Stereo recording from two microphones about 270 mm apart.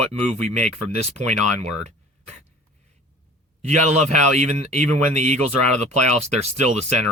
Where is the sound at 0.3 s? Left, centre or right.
Right.